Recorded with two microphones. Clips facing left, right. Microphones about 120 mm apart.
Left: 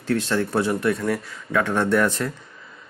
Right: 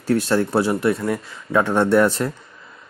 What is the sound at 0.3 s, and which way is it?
Speech, 35° right (ahead or behind).